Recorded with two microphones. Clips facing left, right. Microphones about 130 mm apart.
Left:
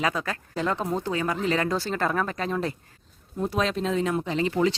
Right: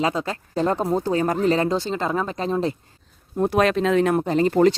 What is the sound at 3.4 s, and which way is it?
Speech, 65° right (ahead or behind).